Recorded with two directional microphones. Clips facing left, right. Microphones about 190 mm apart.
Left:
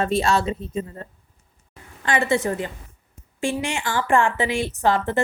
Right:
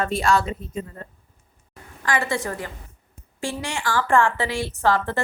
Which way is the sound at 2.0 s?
25° left (ahead or behind).